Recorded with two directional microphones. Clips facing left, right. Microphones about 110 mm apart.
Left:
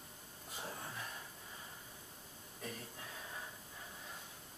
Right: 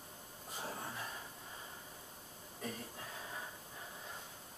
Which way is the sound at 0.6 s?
20° right (ahead or behind).